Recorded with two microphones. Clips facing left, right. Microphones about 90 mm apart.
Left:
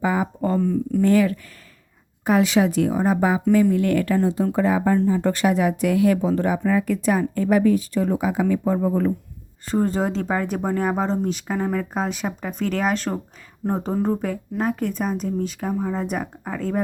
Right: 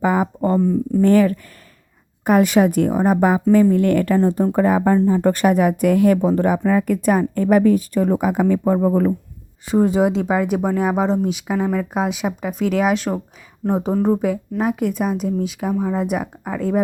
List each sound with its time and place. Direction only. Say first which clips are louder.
0.0 s speech: right 4 dB; 45° right (ahead or behind)
0.6 s speech: right 3 dB; 20° right (ahead or behind)
1.0 s speech: right 4 dB; 45° right (ahead or behind)
9.6 s speech: right 5 dB; 10° right (ahead or behind)